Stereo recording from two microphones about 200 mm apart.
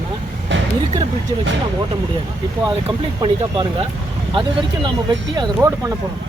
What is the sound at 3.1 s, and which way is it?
Speech, 25° right (ahead or behind).